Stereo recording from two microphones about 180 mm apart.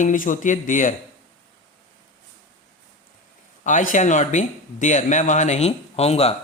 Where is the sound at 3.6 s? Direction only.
45° left (ahead or behind).